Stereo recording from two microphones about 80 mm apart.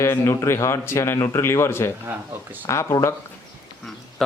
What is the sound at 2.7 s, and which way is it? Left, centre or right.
Speech, left.